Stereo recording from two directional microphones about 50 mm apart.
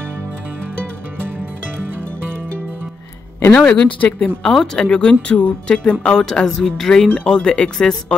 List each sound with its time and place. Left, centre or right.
3.5 s speech: left